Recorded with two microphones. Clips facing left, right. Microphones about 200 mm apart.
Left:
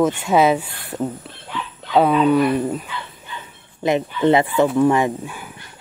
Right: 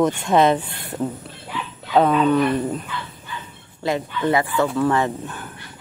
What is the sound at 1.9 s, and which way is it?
Speech, 10° left (ahead or behind).